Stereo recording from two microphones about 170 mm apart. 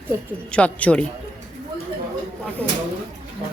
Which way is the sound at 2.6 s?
5° left (ahead or behind).